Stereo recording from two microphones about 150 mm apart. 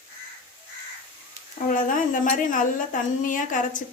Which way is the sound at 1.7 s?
60° left (ahead or behind).